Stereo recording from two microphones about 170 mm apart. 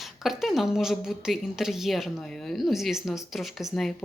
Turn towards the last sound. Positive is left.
turn(degrees=0)  # may be behind; listen again after turning